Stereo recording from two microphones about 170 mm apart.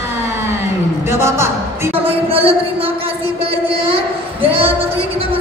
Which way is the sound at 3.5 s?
35° right (ahead or behind).